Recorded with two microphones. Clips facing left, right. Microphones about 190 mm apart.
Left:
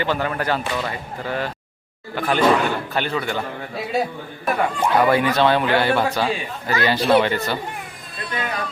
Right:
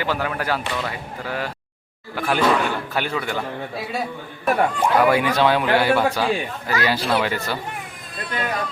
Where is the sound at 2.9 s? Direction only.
10° right (ahead or behind).